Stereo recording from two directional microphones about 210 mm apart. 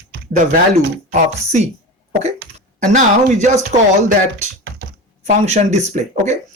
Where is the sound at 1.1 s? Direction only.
30° right (ahead or behind).